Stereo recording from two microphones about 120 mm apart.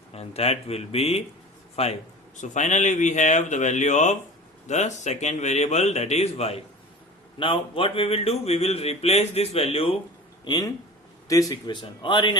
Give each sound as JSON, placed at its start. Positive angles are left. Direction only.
{"t": 0.1, "sound": "a man's voice", "side_deg": 60}
{"t": 7.3, "sound": "a man's voice", "side_deg": 50}
{"t": 10.4, "sound": "a man's voice", "side_deg": 35}